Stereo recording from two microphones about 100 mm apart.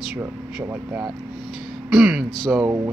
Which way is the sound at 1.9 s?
5° right (ahead or behind).